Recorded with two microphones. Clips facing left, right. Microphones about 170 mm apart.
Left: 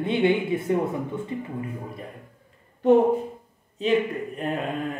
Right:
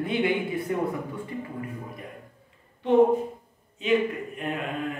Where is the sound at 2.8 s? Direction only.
45° left (ahead or behind).